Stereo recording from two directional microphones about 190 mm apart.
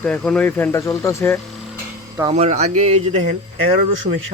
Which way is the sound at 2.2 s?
35° right (ahead or behind).